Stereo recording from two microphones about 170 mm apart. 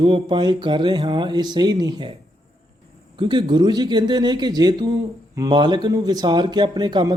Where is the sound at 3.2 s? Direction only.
25° right (ahead or behind).